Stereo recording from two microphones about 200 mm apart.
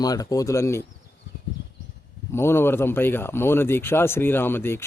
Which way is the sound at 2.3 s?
10° left (ahead or behind).